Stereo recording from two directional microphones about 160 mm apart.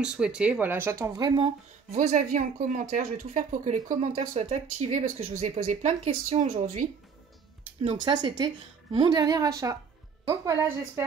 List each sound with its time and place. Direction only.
0.0 s speech: 5° right (ahead or behind); by 2.0 s 35° right (ahead or behind)
2.0 s speech: 50° right (ahead or behind)
7.8 s a woman's voice: 30° right (ahead or behind)